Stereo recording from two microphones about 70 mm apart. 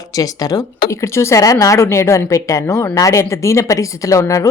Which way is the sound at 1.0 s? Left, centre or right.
Left.